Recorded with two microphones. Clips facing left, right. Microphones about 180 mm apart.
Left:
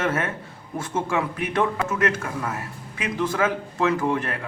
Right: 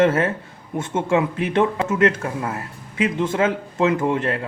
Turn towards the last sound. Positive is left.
turn(degrees=-25)  # may be behind; listen again after turning